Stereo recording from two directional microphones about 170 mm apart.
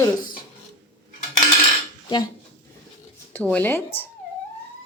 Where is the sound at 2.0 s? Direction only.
25° left (ahead or behind).